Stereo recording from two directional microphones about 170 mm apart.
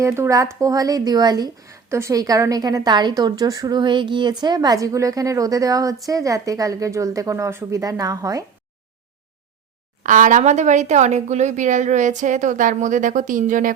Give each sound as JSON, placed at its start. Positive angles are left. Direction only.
{"t": 0.0, "sound": "speech", "side_deg": -15}
{"t": 10.0, "sound": "speech", "side_deg": -50}